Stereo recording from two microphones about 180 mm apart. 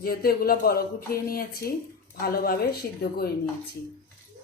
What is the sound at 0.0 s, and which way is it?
A woman's voice, 55° left (ahead or behind).